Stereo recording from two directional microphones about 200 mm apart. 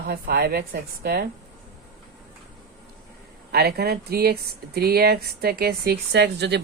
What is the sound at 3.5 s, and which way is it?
A woman's voice, 50° right (ahead or behind).